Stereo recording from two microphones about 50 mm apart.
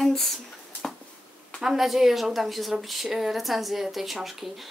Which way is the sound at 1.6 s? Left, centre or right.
Centre.